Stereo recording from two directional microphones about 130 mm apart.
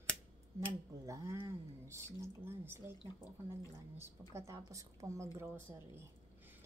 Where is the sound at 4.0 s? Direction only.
20° right (ahead or behind).